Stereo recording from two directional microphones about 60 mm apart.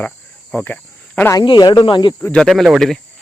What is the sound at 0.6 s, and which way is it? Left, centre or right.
Cricket, left.